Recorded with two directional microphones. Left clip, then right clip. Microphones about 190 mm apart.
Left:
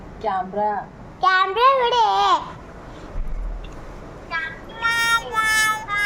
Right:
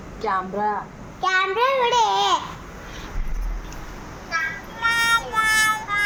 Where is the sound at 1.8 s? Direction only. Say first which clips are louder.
Left 1 dB; 5° left (ahead or behind).